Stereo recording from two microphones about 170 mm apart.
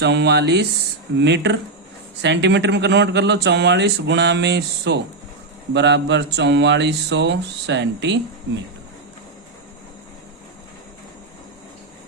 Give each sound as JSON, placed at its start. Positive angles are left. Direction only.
{"t": 0.0, "sound": "speech", "side_deg": -90}